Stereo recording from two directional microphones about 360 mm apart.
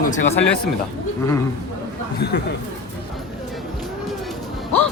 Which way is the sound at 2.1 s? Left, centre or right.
Left.